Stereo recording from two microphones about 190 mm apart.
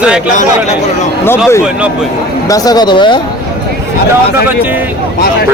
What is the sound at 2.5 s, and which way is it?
Speech, 20° left (ahead or behind).